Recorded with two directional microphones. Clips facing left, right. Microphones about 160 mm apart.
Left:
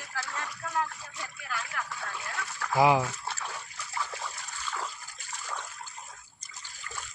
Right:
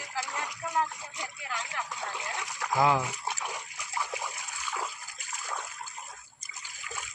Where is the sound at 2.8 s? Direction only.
15° left (ahead or behind).